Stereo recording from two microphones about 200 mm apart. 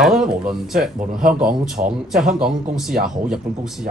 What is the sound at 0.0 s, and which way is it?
Speech, centre (ahead or behind).